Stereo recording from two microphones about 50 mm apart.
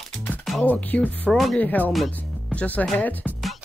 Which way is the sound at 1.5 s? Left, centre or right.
Left.